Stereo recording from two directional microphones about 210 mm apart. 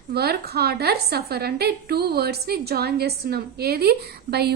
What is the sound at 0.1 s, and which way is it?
A woman's voice, 50° right (ahead or behind).